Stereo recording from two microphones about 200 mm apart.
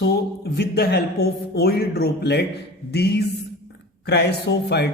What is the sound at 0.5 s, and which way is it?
A man's voice, 55° left (ahead or behind).